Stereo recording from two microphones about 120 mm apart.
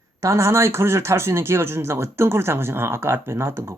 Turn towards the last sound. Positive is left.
turn(degrees=-20)  # may be behind; listen again after turning